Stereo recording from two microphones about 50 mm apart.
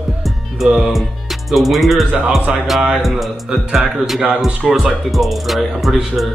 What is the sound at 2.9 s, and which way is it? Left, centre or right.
Speech, centre.